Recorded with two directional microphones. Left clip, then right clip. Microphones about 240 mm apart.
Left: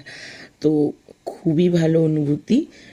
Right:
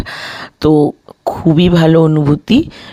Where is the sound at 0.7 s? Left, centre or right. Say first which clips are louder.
Right 10 dB; right.